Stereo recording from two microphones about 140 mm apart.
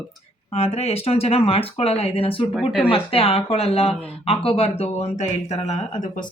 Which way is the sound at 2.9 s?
40° left (ahead or behind).